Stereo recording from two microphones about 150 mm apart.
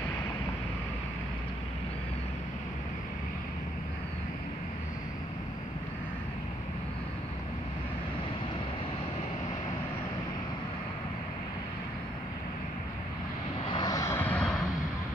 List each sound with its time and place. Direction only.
13.7 s vehicle: 30° left (ahead or behind); by 14.5 s 10° left (ahead or behind)